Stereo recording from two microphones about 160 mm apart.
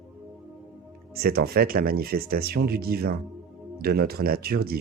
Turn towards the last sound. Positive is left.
turn(degrees=-70)  # may be behind; listen again after turning